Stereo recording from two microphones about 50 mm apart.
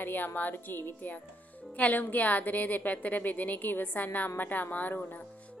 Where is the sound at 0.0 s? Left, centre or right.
Left.